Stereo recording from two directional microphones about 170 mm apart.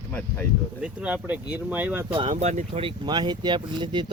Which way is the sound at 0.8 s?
5° right (ahead or behind).